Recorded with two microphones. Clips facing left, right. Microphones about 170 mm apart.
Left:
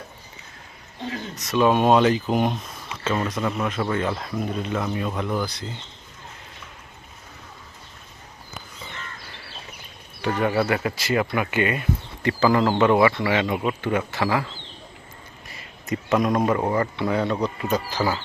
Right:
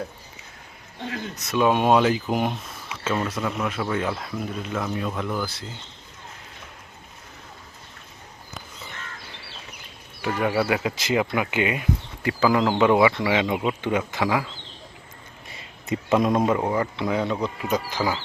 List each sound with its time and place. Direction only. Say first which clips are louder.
1.5 s speech: left 1 dB; 10° right (ahead or behind)
2.3 s a sound: left 2 dB; 5° right (ahead or behind)
3.4 s speech: left 2 dB; 5° right (ahead or behind)
10.4 s speech: even; 5° right (ahead or behind)
15.4 s a sound: even; 25° right (ahead or behind)
16.6 s speech: left 1 dB; 5° right (ahead or behind)